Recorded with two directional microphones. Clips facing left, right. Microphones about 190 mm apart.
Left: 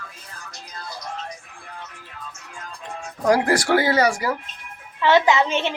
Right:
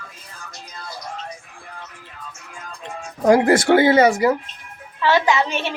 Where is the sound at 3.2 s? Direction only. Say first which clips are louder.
Right 5 dB; 25° right (ahead or behind).